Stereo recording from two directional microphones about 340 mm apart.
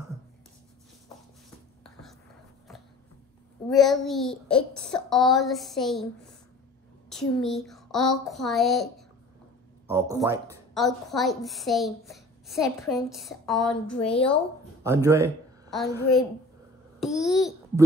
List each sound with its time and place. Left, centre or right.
1.8 s whispering: centre
3.6 s a woman's voice: centre
14.8 s speech: centre
17.0 s a child's voice: centre